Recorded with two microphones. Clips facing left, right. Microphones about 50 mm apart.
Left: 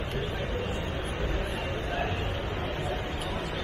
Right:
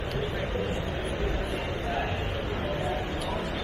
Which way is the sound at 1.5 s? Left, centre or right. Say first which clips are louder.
Right 1 dB; left.